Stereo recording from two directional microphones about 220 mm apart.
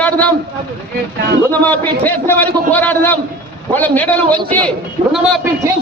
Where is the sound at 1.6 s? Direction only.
10° left (ahead or behind).